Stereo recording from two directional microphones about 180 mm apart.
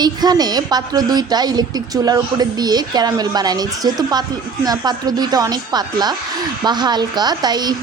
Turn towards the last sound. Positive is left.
turn(degrees=-25)  # may be behind; listen again after turning